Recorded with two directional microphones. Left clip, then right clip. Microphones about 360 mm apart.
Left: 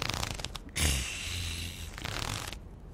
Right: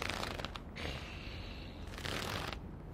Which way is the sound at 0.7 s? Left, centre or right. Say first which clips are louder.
Left 11 dB; left.